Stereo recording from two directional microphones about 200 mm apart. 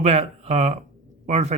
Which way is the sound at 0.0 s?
35° right (ahead or behind).